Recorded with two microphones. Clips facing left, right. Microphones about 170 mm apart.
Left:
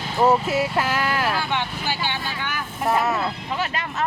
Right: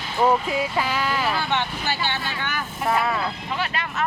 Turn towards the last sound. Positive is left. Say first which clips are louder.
# left 1 dB
turn(degrees=40)  # may be behind; listen again after turning